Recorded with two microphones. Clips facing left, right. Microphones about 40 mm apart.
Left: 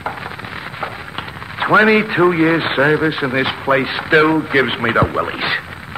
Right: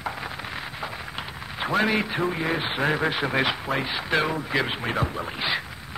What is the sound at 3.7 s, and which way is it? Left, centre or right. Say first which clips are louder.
Speech: left 11 dB; left.